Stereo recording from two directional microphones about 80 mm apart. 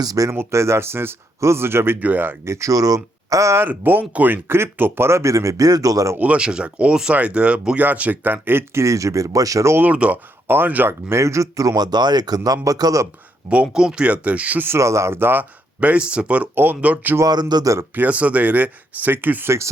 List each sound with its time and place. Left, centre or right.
0.0 s speech: right
0.3 s speech: right
2.4 s speech: right
3.7 s speech: right
6.1 s speech: centre; by 9.7 s right
9.7 s speech: centre
11.1 s speech: right
13.5 s speech: centre
14.8 s speech: right; by 17.2 s centre
17.5 s speech: right
17.9 s speech: centre